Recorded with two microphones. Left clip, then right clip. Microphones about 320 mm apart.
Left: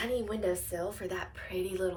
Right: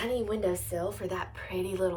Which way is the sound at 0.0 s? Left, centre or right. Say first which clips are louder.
Right 2 dB; centre.